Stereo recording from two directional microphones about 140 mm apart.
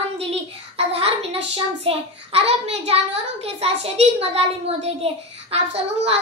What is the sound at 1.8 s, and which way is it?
A child's voice, 45° right (ahead or behind).